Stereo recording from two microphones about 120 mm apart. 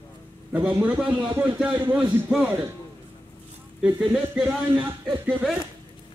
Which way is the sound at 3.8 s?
10° right (ahead or behind).